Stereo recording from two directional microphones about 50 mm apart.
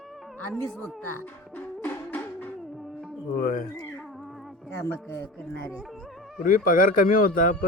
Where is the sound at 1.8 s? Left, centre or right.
Left.